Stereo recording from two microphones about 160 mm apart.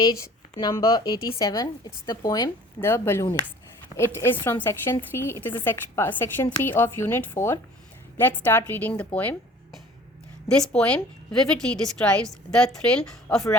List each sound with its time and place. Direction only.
0.6 s a woman's voice: 25° left (ahead or behind); by 9.0 s 10° left (ahead or behind)
10.8 s a woman's voice: 5° left (ahead or behind)